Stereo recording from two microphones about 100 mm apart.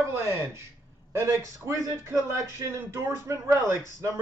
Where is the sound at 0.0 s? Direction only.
25° right (ahead or behind).